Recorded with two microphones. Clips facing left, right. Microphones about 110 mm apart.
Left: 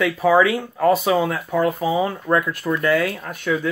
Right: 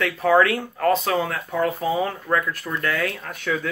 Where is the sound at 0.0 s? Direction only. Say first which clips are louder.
Left 2 dB; 5° left (ahead or behind).